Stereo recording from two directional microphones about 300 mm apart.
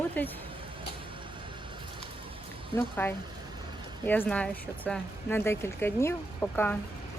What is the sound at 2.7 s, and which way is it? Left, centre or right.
Speech, centre.